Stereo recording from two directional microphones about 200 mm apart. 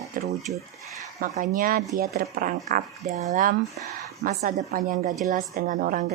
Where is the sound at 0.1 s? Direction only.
45° right (ahead or behind).